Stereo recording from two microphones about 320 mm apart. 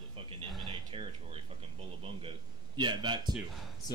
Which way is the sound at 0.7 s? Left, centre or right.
Centre.